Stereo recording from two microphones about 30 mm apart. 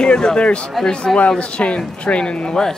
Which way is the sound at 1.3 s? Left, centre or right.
Left.